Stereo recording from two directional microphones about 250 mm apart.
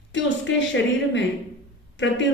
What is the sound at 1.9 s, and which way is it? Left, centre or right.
Speech, left.